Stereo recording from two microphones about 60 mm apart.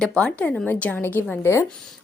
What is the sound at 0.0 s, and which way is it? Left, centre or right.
A woman's voice, centre.